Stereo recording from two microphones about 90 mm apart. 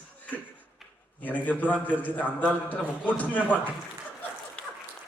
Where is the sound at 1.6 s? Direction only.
15° left (ahead or behind).